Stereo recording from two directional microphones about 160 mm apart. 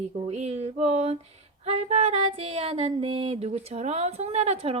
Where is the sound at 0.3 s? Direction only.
45° right (ahead or behind).